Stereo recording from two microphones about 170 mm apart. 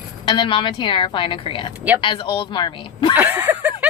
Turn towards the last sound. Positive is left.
turn(degrees=-10)  # may be behind; listen again after turning